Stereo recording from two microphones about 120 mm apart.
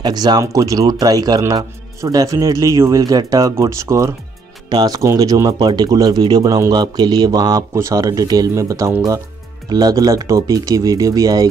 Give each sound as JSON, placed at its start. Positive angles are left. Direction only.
{"t": 0.0, "sound": "speech", "side_deg": -35}